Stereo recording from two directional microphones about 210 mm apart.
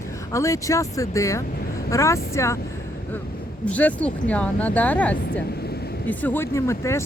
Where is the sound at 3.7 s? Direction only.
5° left (ahead or behind).